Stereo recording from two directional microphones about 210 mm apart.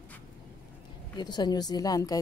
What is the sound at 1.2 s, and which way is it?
Speech, 20° left (ahead or behind).